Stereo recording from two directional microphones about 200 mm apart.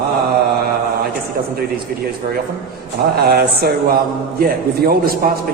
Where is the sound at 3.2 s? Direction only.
50° right (ahead or behind).